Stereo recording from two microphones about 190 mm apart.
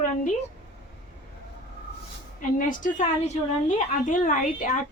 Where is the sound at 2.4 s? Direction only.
45° left (ahead or behind).